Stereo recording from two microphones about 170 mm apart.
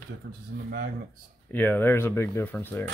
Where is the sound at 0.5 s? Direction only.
75° right (ahead or behind).